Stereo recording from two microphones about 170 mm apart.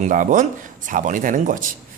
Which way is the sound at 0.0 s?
50° right (ahead or behind).